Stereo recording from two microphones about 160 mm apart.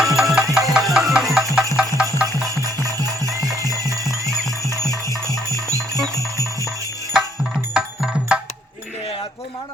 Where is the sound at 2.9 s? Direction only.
20° right (ahead or behind).